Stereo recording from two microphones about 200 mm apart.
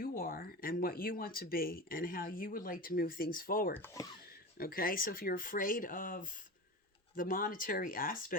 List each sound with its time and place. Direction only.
0.0 s speech: 45° left (ahead or behind)
3.8 s speech: 10° left (ahead or behind)
4.5 s speech: 50° left (ahead or behind)